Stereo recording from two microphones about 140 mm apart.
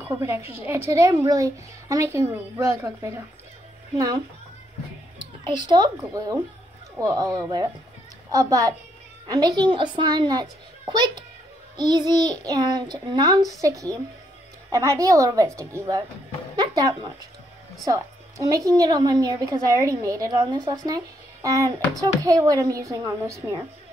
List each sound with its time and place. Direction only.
0.0 s a woman's voice: 20° right (ahead or behind)
5.7 s a child's voice: 30° right (ahead or behind)
16.5 s music: 30° right (ahead or behind)
17.8 s a child's voice: 25° right (ahead or behind)